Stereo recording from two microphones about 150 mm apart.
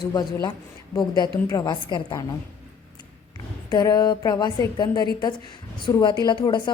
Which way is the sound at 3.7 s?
25° left (ahead or behind).